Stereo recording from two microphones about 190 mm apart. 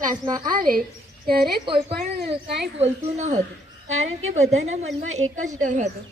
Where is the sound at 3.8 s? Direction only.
90° right.